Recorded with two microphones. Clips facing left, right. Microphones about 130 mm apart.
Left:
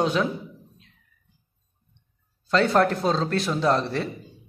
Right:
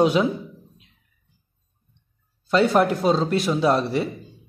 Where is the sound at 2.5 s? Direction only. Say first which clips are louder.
Right 2 dB; 10° right (ahead or behind).